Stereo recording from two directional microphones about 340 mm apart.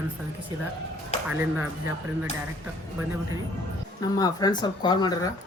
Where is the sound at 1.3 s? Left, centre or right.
Centre.